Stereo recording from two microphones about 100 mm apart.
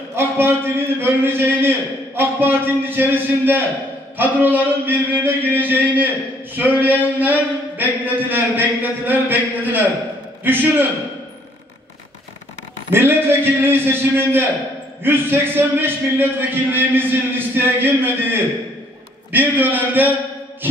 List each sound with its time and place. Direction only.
0.1 s a man's voice: 25° right (ahead or behind)
12.9 s a man's voice: 20° right (ahead or behind)